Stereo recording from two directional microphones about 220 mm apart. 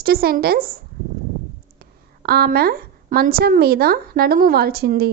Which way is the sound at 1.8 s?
45° right (ahead or behind).